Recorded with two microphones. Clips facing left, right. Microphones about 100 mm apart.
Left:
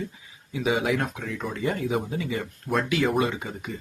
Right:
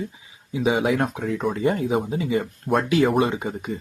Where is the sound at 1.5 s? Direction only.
30° right (ahead or behind).